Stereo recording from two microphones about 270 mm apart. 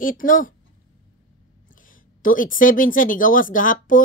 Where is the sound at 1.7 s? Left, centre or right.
Left.